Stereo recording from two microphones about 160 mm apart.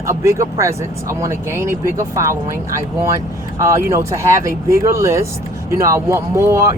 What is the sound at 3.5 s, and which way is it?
Speech, 20° right (ahead or behind).